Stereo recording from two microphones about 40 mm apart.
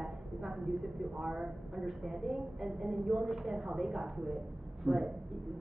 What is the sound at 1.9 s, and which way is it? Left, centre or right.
A woman's voice, centre.